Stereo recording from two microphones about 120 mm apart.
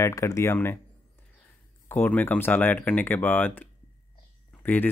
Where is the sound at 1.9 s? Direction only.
15° left (ahead or behind).